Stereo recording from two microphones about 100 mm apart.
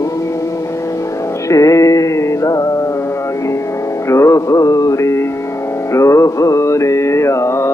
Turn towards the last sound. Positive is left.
turn(degrees=30)  # may be behind; listen again after turning